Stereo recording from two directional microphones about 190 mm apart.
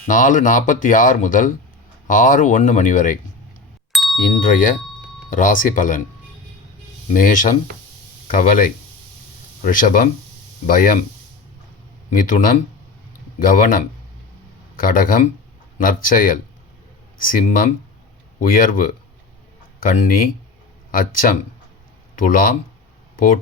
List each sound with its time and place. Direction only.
0.1 s speech: 40° left (ahead or behind)
3.9 s ding: centre (ahead or behind)
4.4 s speech: 45° left (ahead or behind)
7.1 s speech: 45° left (ahead or behind)
12.1 s speech: 45° left (ahead or behind)
14.8 s speech: 45° left (ahead or behind)